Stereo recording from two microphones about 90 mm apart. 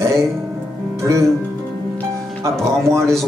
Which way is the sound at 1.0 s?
35° right (ahead or behind).